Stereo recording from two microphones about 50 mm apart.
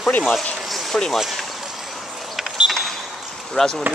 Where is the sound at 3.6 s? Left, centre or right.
Centre.